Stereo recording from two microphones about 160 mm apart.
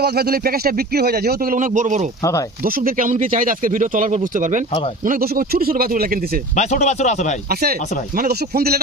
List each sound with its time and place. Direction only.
0.0 s speech: 75° right (ahead or behind)
1.5 s speech: 50° right (ahead or behind)
2.6 s speech: 65° right (ahead or behind)
5.0 s speech: 65° right (ahead or behind)
6.6 s speech: 45° left (ahead or behind)
7.5 s speech: 75° right (ahead or behind)